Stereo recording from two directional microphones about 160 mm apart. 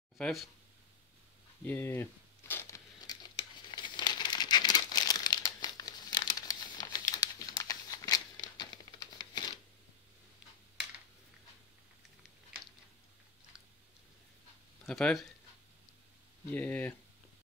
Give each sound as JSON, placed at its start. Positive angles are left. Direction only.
{"t": 0.2, "sound": "speech", "side_deg": 0}
{"t": 1.6, "sound": "a sound", "side_deg": 15}
{"t": 3.7, "sound": "crumpling", "side_deg": 30}
{"t": 14.9, "sound": "speech", "side_deg": 5}
{"t": 16.4, "sound": "speech", "side_deg": 10}